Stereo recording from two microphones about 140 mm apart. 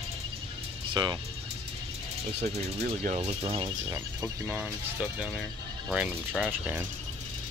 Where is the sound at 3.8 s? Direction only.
20° right (ahead or behind).